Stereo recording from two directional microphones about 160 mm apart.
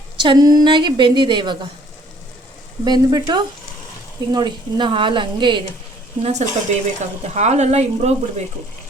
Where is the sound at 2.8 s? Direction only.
25° right (ahead or behind).